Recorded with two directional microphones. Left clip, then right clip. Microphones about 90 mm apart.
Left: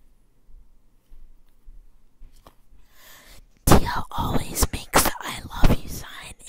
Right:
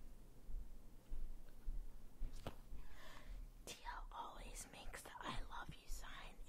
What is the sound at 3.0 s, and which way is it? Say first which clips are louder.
Whispering: left 13 dB; 50° left (ahead or behind).